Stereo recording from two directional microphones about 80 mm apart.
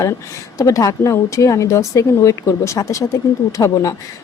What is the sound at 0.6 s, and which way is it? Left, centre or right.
Speech, left.